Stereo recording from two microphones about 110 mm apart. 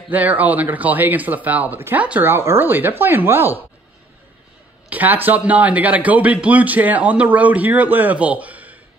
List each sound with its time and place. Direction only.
0.1 s a man's voice: 15° right (ahead or behind)
4.8 s a man's voice: 15° right (ahead or behind)